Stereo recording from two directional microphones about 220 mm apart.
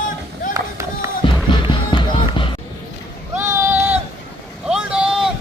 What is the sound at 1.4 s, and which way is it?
Music, 20° left (ahead or behind).